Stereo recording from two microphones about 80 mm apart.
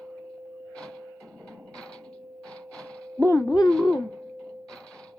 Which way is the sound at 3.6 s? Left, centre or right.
Centre.